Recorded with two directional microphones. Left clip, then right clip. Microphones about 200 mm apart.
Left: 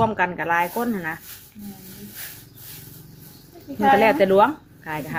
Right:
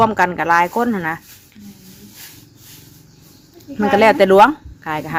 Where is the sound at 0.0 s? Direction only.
30° right (ahead or behind).